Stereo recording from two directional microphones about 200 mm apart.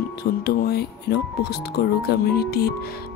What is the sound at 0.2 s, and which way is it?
Speech, 50° left (ahead or behind).